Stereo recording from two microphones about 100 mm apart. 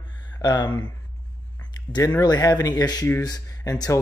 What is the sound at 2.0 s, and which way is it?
Speech, 40° left (ahead or behind).